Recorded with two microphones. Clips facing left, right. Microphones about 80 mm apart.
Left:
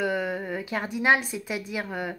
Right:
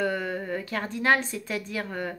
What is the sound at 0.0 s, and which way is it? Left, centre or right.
A woman's voice, centre.